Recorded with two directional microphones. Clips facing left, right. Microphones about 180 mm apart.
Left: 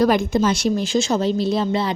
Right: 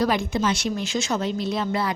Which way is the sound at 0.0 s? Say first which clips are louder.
Left 5 dB; 45° left (ahead or behind).